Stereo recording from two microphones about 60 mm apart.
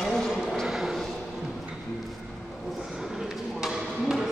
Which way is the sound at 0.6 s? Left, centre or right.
Centre.